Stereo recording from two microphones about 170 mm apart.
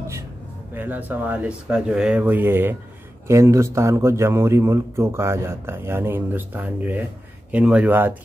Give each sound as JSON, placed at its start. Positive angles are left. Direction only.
{"t": 0.7, "sound": "a man's voice", "side_deg": -10}